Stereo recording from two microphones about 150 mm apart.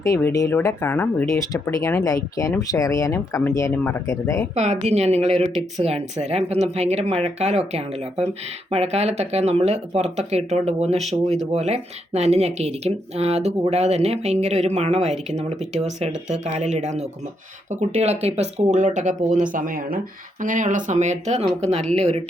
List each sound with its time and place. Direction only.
0.0 s speech: 20° left (ahead or behind)
1.4 s speech: 20° left (ahead or behind)
4.5 s speech: 45° right (ahead or behind)